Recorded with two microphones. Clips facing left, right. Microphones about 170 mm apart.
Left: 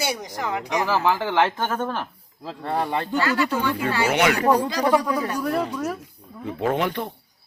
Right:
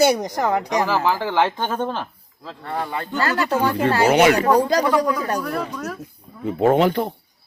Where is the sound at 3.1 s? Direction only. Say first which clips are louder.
Right 3 dB; 45° right (ahead or behind).